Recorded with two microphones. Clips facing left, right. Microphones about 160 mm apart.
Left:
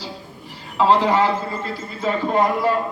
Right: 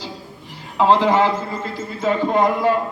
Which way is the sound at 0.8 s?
20° right (ahead or behind).